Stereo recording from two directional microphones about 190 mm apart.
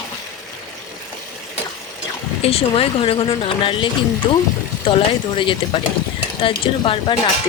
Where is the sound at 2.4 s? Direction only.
30° left (ahead or behind).